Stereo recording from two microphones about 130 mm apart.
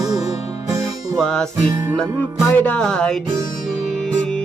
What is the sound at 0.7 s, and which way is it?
Music, 25° right (ahead or behind).